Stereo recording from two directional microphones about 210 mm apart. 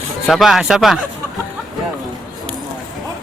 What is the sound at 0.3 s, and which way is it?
Speech, centre (ahead or behind).